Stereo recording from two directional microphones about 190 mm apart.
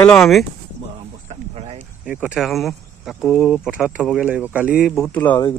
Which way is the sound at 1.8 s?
5° right (ahead or behind).